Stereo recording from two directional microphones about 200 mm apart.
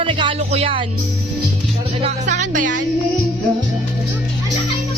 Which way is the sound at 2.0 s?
35° right (ahead or behind).